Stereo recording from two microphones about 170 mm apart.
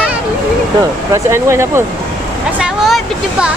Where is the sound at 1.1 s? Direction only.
15° right (ahead or behind).